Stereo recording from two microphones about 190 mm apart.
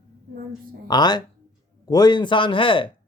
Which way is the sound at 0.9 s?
20° left (ahead or behind).